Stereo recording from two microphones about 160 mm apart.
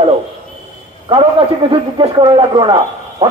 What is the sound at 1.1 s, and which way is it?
A man's voice, 35° right (ahead or behind).